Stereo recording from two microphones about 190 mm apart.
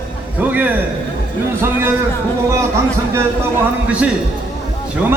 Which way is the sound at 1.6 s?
10° right (ahead or behind).